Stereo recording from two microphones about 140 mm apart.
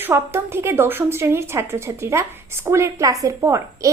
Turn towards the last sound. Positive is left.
turn(degrees=-20)  # may be behind; listen again after turning